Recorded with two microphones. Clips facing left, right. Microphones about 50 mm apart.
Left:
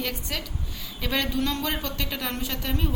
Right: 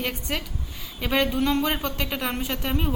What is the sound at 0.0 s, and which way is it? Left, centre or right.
A woman's voice, right.